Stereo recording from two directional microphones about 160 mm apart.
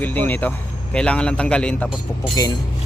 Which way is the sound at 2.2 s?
25° left (ahead or behind).